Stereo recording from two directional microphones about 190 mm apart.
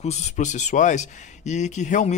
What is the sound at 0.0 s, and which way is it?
Speech, 35° left (ahead or behind).